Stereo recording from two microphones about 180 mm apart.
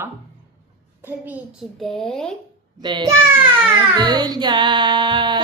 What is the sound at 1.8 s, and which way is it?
Speech, 5° left (ahead or behind).